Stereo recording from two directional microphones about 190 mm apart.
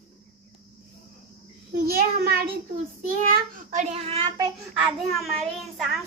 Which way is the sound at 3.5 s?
35° right (ahead or behind).